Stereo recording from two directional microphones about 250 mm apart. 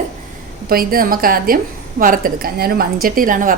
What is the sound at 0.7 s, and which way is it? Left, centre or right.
A woman's voice, right.